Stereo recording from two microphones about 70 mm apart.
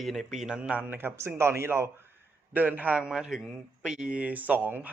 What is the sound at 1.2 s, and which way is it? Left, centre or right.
Speech, right.